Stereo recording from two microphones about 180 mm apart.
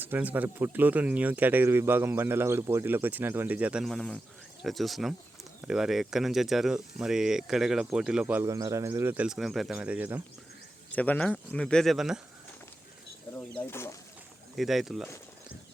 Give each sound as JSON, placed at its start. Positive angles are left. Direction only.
{"t": 0.0, "sound": "speech", "side_deg": -10}
{"t": 10.9, "sound": "speech", "side_deg": 10}
{"t": 13.5, "sound": "speech", "side_deg": 10}
{"t": 14.5, "sound": "speech", "side_deg": 0}